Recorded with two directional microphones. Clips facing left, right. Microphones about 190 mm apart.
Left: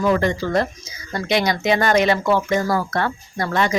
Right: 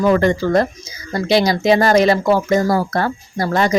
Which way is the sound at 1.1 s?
35° right (ahead or behind).